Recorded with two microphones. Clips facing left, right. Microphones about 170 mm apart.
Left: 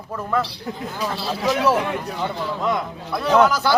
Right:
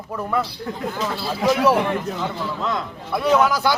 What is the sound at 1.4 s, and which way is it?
Speech, 15° right (ahead or behind).